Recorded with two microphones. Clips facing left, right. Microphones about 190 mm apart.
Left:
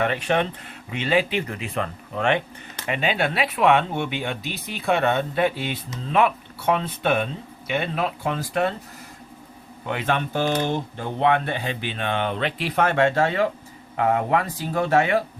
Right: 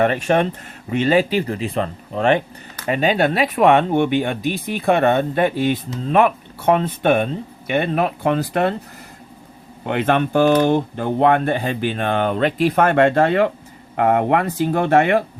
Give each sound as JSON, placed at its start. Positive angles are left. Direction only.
{"t": 0.0, "sound": "speech", "side_deg": -45}
{"t": 9.8, "sound": "speech", "side_deg": -60}